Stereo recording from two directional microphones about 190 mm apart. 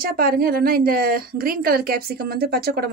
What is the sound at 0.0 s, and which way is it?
A woman's voice, 50° right (ahead or behind).